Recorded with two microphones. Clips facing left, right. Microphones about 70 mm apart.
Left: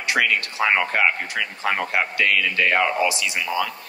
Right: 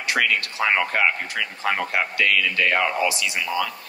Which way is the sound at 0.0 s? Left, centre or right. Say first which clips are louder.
Left 1 dB; left.